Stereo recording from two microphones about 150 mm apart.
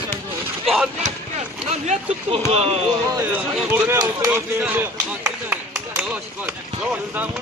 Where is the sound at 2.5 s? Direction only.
40° right (ahead or behind).